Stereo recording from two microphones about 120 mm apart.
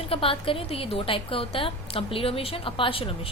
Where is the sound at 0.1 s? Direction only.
50° left (ahead or behind).